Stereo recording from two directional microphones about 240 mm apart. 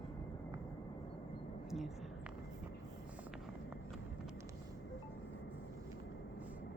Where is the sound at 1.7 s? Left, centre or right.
Centre.